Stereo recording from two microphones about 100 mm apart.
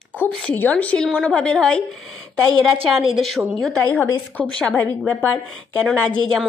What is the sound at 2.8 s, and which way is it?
Speech, 65° right (ahead or behind).